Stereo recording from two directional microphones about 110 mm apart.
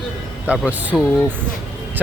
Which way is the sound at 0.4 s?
10° right (ahead or behind).